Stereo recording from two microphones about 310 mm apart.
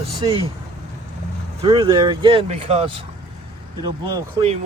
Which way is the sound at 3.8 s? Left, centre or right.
Centre.